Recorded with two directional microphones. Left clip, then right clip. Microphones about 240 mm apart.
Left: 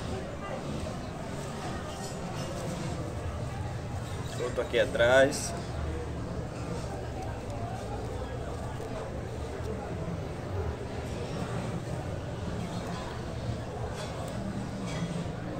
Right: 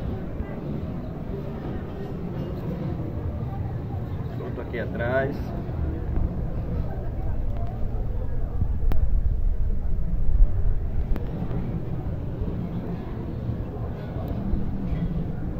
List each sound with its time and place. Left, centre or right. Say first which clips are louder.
4.7 s speech: left 4 dB; left